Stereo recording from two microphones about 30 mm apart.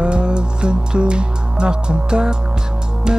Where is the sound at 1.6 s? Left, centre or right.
Right.